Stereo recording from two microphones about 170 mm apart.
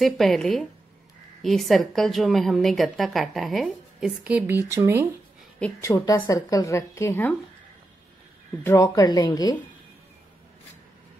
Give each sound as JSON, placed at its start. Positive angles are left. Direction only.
{"t": 0.0, "sound": "a woman's voice", "side_deg": 0}
{"t": 5.6, "sound": "a woman's voice", "side_deg": 15}
{"t": 8.6, "sound": "speech", "side_deg": 20}